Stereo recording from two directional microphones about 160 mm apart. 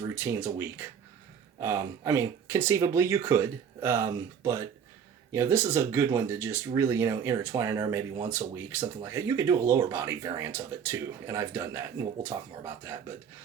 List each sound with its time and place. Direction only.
0.2 s speech: 15° right (ahead or behind)